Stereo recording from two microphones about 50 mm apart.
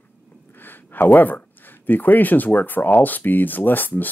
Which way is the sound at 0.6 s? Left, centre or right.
Left.